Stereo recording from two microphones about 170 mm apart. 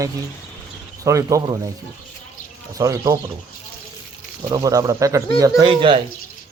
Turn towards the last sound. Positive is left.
turn(degrees=-30)  # may be behind; listen again after turning